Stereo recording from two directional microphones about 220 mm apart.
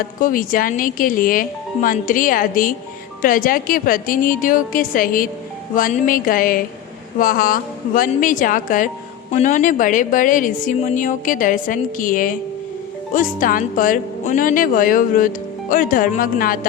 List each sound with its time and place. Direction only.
0.0 s speech: 40° left (ahead or behind)